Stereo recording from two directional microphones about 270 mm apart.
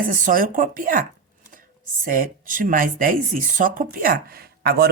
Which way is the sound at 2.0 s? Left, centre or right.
Right.